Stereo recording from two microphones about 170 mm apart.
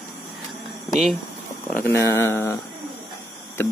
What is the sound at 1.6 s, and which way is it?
Speech, 10° left (ahead or behind).